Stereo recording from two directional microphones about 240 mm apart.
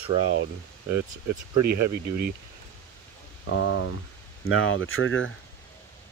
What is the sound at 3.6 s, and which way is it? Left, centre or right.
Speech, left.